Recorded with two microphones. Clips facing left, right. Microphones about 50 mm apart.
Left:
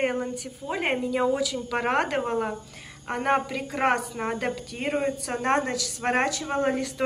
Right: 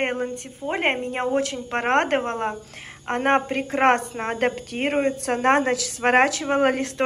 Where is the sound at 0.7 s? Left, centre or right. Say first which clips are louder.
Right 3 dB; right.